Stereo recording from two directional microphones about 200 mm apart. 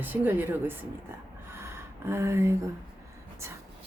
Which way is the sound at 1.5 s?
15° right (ahead or behind).